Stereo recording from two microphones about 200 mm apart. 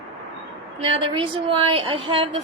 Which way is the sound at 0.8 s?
30° right (ahead or behind).